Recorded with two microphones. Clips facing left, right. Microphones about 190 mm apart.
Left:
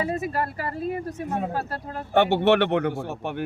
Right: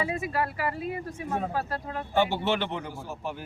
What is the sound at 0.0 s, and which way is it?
Speech, 40° left (ahead or behind).